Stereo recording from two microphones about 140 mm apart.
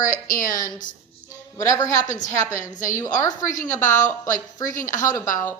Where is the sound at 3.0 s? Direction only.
25° left (ahead or behind).